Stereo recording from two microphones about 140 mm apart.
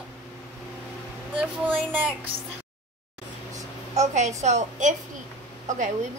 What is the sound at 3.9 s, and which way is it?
A woman's voice, 55° right (ahead or behind).